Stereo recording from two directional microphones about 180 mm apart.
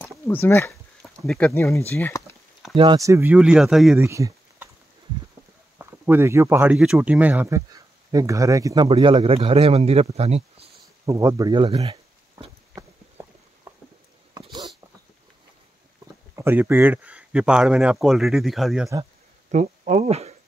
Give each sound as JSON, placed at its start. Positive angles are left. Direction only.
{"t": 0.3, "sound": "speech", "side_deg": 10}
{"t": 1.2, "sound": "speech", "side_deg": 0}
{"t": 1.5, "sound": "speech", "side_deg": 15}
{"t": 2.7, "sound": "speech", "side_deg": -25}
{"t": 4.0, "sound": "a sound", "side_deg": -15}
{"t": 5.8, "sound": "speech", "side_deg": -10}
{"t": 8.8, "sound": "speech", "side_deg": -30}
{"t": 11.1, "sound": "speech", "side_deg": -15}
{"t": 13.2, "sound": "a sound", "side_deg": -15}
{"t": 16.3, "sound": "speech", "side_deg": -10}
{"t": 19.5, "sound": "speech", "side_deg": -40}